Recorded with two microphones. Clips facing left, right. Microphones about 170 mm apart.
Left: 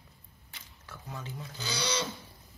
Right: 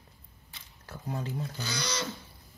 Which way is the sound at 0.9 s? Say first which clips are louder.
Right 7 dB; 40° right (ahead or behind).